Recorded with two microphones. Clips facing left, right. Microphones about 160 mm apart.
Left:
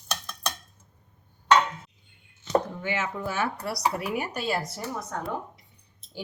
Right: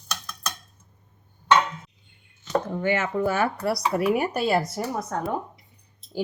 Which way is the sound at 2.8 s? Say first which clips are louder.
Right 7 dB; 55° right (ahead or behind).